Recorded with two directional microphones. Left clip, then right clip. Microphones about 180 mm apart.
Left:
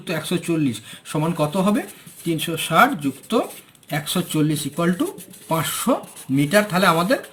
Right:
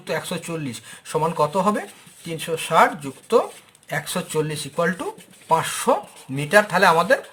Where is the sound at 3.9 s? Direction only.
40° right (ahead or behind).